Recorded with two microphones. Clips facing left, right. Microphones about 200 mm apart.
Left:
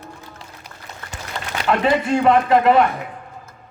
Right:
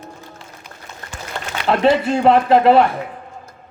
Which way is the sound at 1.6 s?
30° right (ahead or behind).